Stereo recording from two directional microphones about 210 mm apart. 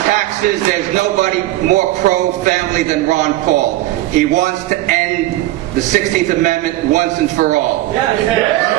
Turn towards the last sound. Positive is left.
turn(degrees=-35)  # may be behind; listen again after turning